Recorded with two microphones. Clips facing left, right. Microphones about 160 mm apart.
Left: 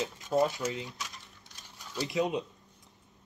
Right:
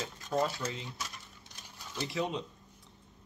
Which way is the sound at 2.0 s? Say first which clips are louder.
Left 4 dB; 20° left (ahead or behind).